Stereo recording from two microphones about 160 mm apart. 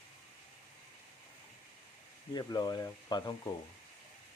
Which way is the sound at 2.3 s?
25° left (ahead or behind).